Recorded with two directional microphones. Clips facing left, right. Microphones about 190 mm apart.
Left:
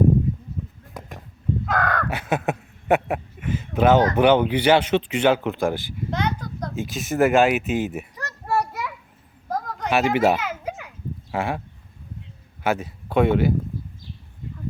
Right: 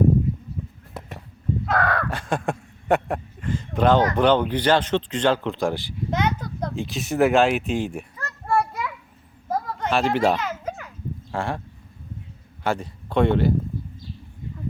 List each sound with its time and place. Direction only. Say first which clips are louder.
1.6 s crow: right 1 dB; centre (ahead or behind)
4.2 s speech: left 2 dB; 10° left (ahead or behind)
6.1 s a sound: right 2 dB; 20° right (ahead or behind)
6.7 s speech: even; centre (ahead or behind)
8.4 s children playing: right 1 dB; 5° left (ahead or behind)
9.5 s a sound: even; centre (ahead or behind)
12.6 s speech: left 2 dB; 5° left (ahead or behind)